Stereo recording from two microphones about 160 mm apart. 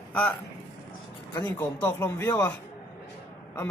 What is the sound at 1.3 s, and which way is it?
A man's voice, 25° left (ahead or behind).